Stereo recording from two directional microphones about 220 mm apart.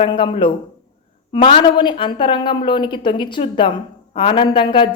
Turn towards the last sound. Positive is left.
turn(degrees=20)  # may be behind; listen again after turning